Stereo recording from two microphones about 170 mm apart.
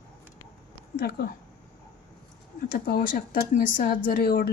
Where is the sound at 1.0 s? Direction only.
70° left (ahead or behind).